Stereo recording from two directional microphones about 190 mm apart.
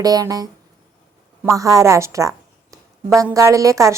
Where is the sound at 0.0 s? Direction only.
20° right (ahead or behind).